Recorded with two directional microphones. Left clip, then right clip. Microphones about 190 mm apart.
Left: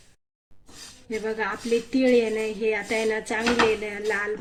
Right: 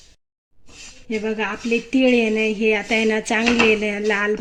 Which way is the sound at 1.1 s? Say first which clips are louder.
Right 4 dB; 40° right (ahead or behind).